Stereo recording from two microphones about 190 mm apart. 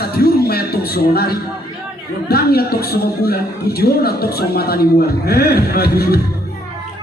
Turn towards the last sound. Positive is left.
turn(degrees=55)  # may be behind; listen again after turning